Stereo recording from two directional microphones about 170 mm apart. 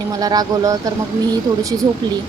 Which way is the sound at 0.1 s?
20° right (ahead or behind).